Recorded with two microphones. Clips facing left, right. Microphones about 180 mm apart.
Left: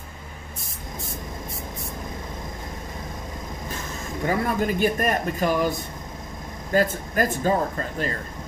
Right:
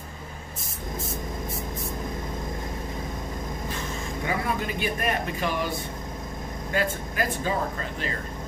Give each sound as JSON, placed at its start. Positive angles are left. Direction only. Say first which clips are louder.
{"t": 4.3, "sound": "a man's voice", "louder": "left 6 dB", "side_deg": 45}
{"t": 6.7, "sound": "a man's voice", "louder": "left 6 dB", "side_deg": 45}